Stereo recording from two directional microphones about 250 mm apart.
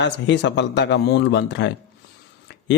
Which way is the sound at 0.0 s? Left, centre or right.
Left.